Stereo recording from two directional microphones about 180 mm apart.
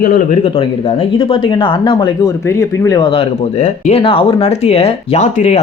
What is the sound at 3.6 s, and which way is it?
Speech, 40° left (ahead or behind).